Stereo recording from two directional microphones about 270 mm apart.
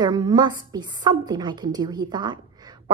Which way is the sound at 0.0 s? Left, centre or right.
Centre.